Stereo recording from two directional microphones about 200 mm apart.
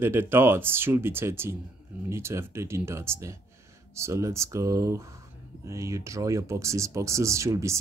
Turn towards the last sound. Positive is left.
turn(degrees=-15)  # may be behind; listen again after turning